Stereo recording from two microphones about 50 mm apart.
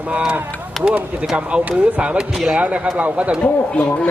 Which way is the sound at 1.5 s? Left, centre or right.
Right.